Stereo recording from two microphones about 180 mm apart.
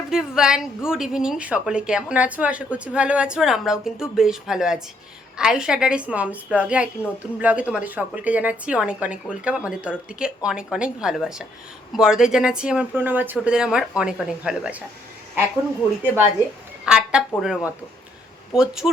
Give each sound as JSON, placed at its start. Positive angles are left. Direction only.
{"t": 0.1, "sound": "a woman's voice", "side_deg": -5}
{"t": 16.8, "sound": "a woman's voice", "side_deg": -5}